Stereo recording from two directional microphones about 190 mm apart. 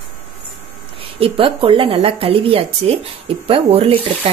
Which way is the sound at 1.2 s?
30° right (ahead or behind).